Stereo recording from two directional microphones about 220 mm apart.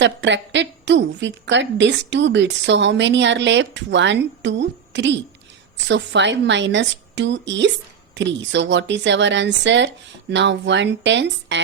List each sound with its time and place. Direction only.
0.0 s a woman's voice: 55° right (ahead or behind)